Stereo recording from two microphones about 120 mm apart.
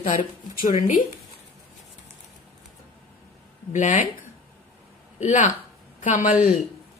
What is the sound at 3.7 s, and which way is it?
Speech, 90° left.